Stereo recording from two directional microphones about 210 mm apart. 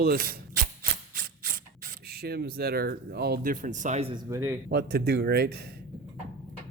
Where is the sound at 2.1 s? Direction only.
50° right (ahead or behind).